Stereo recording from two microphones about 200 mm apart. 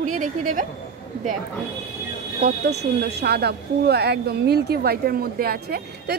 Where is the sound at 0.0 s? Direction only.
40° right (ahead or behind).